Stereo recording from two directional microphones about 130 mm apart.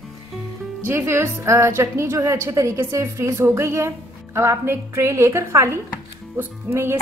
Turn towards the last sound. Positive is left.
turn(degrees=-20)  # may be behind; listen again after turning